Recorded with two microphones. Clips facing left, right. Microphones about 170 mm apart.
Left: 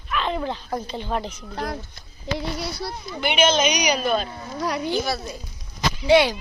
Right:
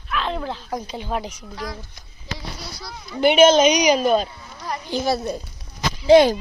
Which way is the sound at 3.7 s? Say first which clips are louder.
Right 6 dB; 25° right (ahead or behind).